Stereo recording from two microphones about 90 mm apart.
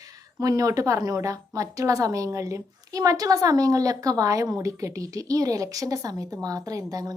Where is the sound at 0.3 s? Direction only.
40° right (ahead or behind).